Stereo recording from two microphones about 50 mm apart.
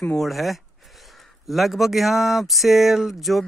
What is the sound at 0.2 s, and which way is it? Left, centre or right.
Speech, centre.